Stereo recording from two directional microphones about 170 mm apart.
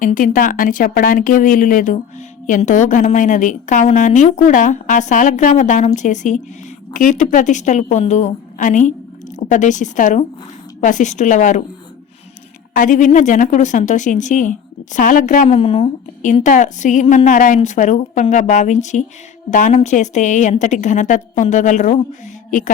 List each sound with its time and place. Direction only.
0.0 s speech: 50° left (ahead or behind)
12.7 s speech: 50° left (ahead or behind)
15.4 s speech: 35° left (ahead or behind)
16.2 s speech: 45° left (ahead or behind)
22.4 s a sound: 50° left (ahead or behind)